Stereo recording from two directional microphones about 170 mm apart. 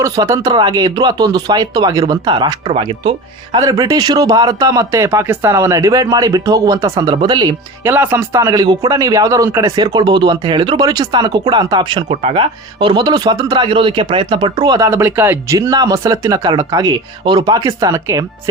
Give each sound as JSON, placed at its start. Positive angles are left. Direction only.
{"t": 0.0, "sound": "a man's voice", "side_deg": -20}
{"t": 3.6, "sound": "a man's voice", "side_deg": -20}
{"t": 7.9, "sound": "a man's voice", "side_deg": -10}